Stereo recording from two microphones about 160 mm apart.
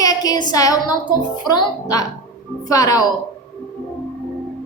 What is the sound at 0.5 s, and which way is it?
A woman's voice, 25° left (ahead or behind).